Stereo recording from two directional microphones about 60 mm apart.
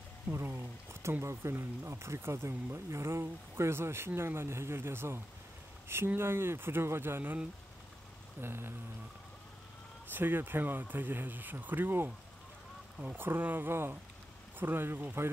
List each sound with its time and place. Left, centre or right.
0.3 s a sound: right
1.2 s speech: right
8.4 s speech: right
10.1 s speech: right